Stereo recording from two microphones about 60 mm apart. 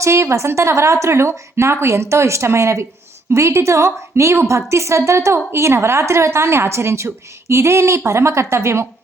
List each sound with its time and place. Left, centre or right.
0.0 s a woman's voice: right